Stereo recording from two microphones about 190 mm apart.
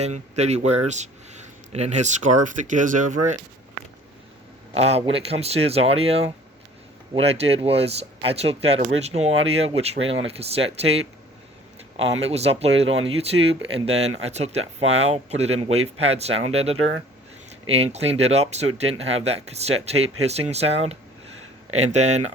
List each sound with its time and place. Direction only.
0.0 s speech: 35° right (ahead or behind)
4.7 s speech: 35° right (ahead or behind)
12.1 s speech: 35° right (ahead or behind)